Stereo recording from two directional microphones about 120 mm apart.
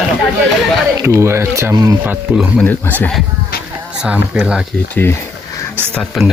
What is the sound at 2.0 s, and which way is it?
Speech, 15° right (ahead or behind).